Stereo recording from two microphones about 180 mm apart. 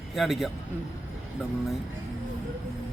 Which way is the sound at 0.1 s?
Centre (ahead or behind).